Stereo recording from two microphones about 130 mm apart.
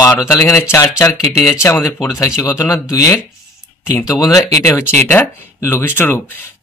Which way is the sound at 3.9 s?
25° left (ahead or behind).